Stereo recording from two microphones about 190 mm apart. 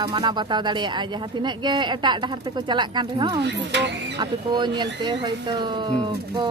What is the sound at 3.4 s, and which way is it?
Speech, 65° right (ahead or behind).